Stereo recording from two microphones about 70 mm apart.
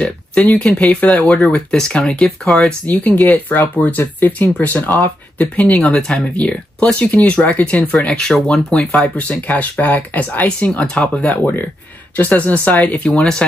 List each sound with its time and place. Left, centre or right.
0.0 s a sound: centre
0.5 s speech: centre
8.2 s speech: centre
9.3 s speech: left